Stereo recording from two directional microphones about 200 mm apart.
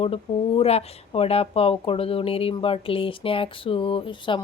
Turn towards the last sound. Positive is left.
turn(degrees=25)  # may be behind; listen again after turning